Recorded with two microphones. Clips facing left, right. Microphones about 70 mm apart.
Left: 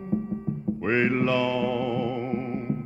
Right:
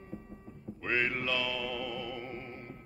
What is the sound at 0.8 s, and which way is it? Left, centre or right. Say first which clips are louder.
Music: left 9 dB; left.